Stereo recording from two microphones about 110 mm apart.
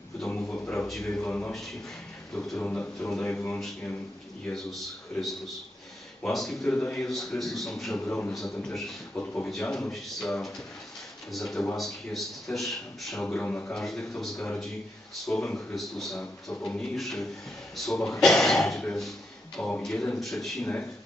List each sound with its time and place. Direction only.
0.3 s a sound: 10° left (ahead or behind)
0.9 s a man's voice: centre (ahead or behind)
6.2 s a man's voice: centre (ahead or behind)
7.9 s speech: 15° left (ahead or behind)
8.3 s a man's voice: 5° left (ahead or behind)
9.1 s speech: 15° left (ahead or behind)
9.5 s a man's voice: 5° left (ahead or behind)
13.2 s a man's voice: 10° left (ahead or behind)